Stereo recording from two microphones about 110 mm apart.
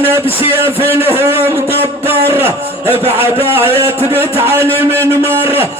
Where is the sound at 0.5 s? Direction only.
20° right (ahead or behind).